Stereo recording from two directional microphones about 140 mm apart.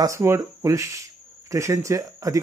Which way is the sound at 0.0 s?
20° right (ahead or behind).